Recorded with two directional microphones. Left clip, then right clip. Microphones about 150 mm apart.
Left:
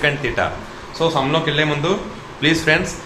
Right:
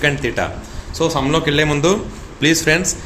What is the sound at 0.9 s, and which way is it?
Speech, 75° right (ahead or behind).